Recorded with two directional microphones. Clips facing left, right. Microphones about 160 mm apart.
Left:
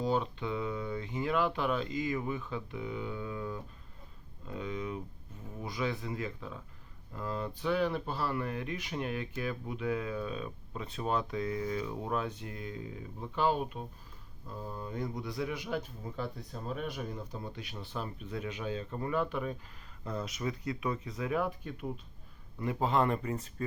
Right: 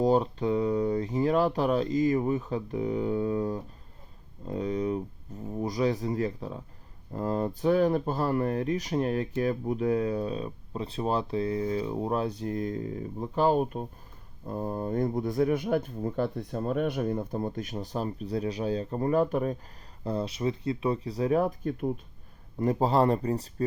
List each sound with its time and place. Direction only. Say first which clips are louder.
0.0 s speech: right 8 dB; 40° right (ahead or behind)
20.1 s speech: right 7 dB; 30° right (ahead or behind)